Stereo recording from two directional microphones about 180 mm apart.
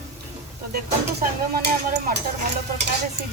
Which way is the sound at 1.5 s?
60° right (ahead or behind).